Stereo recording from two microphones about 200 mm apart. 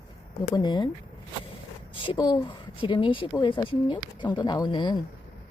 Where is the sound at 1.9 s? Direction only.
25° left (ahead or behind).